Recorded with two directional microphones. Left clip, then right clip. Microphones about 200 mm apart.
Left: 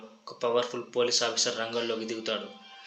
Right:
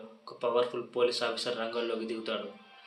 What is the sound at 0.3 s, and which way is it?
Speech, 20° left (ahead or behind).